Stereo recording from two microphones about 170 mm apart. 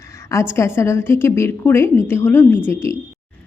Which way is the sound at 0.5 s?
15° left (ahead or behind).